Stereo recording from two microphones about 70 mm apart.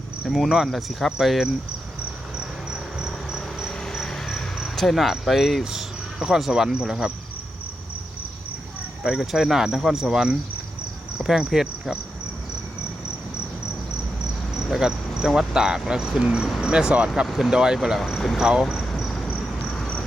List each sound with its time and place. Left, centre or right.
0.3 s speech: centre
2.4 s cricket: centre
3.7 s cricket: centre
9.1 s speech: centre
11.2 s cricket: centre
14.7 s speech: centre
17.2 s speech: centre
18.3 s speech: centre
18.9 s cricket: centre